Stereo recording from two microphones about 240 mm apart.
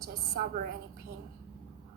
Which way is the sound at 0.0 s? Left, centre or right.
Right.